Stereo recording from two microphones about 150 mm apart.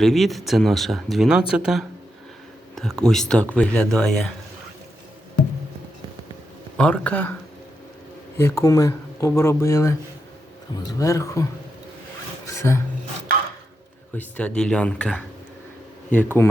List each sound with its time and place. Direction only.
0.0 s speech: centre (ahead or behind)
6.7 s speech: 5° left (ahead or behind)
8.4 s speech: 20° left (ahead or behind)
12.5 s speech: 20° left (ahead or behind)
14.2 s speech: 10° left (ahead or behind)